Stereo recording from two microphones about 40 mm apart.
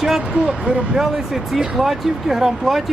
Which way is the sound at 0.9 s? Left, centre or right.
Centre.